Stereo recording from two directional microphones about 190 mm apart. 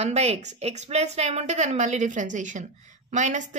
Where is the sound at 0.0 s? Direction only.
35° right (ahead or behind).